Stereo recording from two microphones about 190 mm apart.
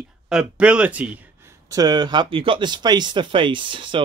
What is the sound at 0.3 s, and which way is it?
Speech, 5° right (ahead or behind).